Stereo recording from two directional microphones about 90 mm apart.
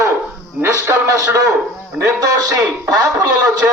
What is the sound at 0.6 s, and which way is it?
A man's voice, 35° right (ahead or behind).